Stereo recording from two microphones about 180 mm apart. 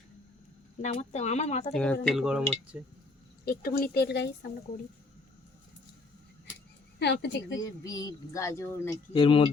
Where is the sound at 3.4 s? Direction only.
60° left (ahead or behind).